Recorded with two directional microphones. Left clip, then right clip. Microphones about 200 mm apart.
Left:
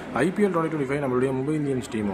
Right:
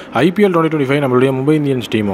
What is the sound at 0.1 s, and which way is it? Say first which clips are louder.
A man's voice: right 11 dB; 40° right (ahead or behind).